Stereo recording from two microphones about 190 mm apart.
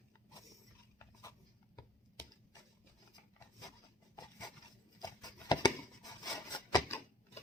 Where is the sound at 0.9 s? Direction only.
15° left (ahead or behind).